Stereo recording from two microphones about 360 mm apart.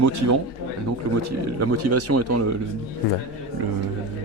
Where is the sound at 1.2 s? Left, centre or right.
Right.